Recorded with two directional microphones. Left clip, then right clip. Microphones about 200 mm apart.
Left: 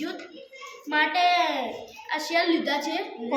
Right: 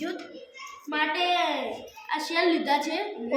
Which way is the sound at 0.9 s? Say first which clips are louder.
Left 4 dB; 30° left (ahead or behind).